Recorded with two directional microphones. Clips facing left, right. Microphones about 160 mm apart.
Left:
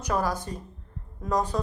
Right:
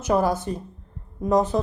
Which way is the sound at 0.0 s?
20° right (ahead or behind).